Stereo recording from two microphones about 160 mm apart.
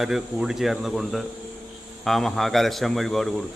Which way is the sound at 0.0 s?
5° right (ahead or behind).